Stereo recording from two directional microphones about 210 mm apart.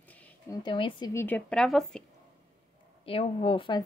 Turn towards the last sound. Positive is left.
turn(degrees=25)  # may be behind; listen again after turning